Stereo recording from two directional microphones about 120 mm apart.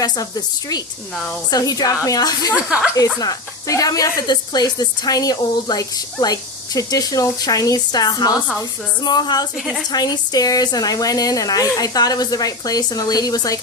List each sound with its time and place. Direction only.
1.5 s speech: 30° left (ahead or behind)
2.6 s speech: 10° right (ahead or behind)
3.2 s speech: 30° left (ahead or behind)
9.6 s a woman's voice: centre (ahead or behind)
9.9 s speech: 35° left (ahead or behind)